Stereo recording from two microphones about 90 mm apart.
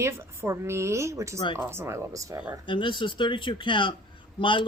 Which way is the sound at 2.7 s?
65° left (ahead or behind).